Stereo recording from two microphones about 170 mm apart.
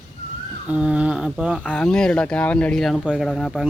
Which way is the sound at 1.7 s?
5° left (ahead or behind).